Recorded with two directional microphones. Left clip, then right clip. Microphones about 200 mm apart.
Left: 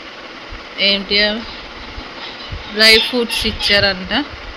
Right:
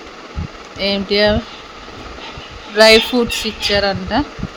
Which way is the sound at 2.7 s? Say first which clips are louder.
Right 2 dB; 35° right (ahead or behind).